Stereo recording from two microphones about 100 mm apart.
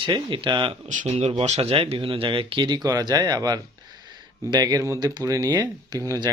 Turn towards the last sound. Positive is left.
turn(degrees=-35)  # may be behind; listen again after turning